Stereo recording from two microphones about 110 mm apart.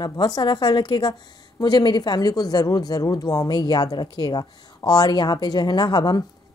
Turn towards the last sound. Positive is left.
turn(degrees=40)  # may be behind; listen again after turning